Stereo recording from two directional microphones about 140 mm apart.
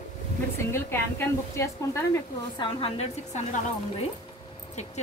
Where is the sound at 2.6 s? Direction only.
40° left (ahead or behind).